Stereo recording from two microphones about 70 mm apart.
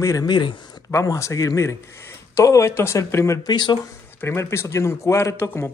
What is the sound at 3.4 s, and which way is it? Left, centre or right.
Speech, left.